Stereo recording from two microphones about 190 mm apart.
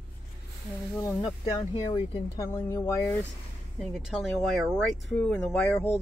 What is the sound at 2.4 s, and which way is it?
Speech, 15° left (ahead or behind).